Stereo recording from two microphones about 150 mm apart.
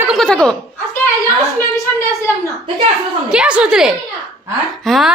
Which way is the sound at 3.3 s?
5° right (ahead or behind).